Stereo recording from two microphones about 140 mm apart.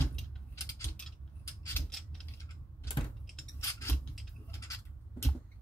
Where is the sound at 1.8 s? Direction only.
5° left (ahead or behind).